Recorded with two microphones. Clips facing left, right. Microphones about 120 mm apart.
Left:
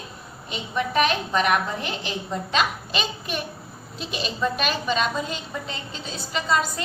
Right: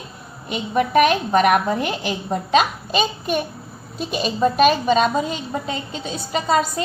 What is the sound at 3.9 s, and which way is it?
A woman's voice, 50° right (ahead or behind).